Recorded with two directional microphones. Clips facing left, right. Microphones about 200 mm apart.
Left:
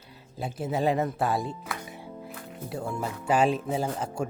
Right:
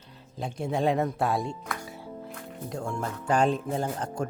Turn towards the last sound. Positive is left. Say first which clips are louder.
# left 1 dB
turn(degrees=5)  # may be behind; listen again after turning